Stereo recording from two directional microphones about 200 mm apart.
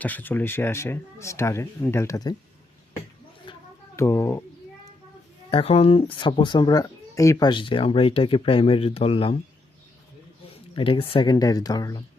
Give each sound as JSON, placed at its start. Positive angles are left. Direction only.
{"t": 0.0, "sound": "speech", "side_deg": 10}
{"t": 3.5, "sound": "a sound", "side_deg": 25}
{"t": 3.9, "sound": "speech", "side_deg": 15}
{"t": 5.5, "sound": "speech", "side_deg": 30}
{"t": 10.5, "sound": "speech", "side_deg": 25}